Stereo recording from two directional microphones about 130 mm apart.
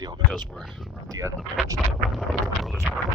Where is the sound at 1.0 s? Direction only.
25° right (ahead or behind).